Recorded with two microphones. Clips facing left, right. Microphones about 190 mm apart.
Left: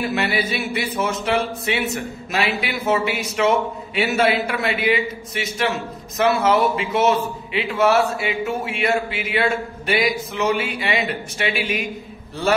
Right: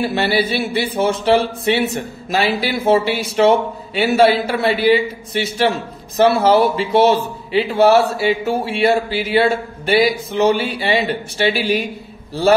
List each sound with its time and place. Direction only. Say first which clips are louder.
0.0 s speech: right 5 dB; 30° right (ahead or behind)